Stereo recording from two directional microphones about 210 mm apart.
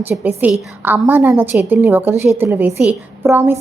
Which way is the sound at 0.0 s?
10° right (ahead or behind).